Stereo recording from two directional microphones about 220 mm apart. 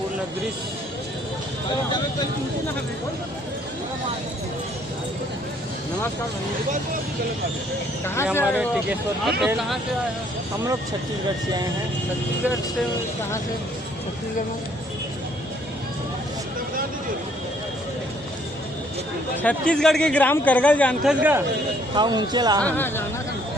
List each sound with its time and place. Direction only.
8.0 s speech: 10° left (ahead or behind)
8.4 s a man's voice: centre (ahead or behind)
19.4 s a man's voice: 5° left (ahead or behind)
21.9 s speech: 20° right (ahead or behind)
22.6 s speech: 10° left (ahead or behind)